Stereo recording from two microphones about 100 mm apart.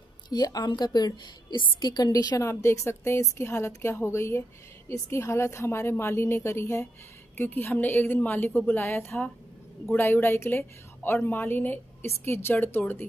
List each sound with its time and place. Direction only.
0.3 s a woman's voice: 40° left (ahead or behind)
2.4 s a woman's voice: 30° left (ahead or behind)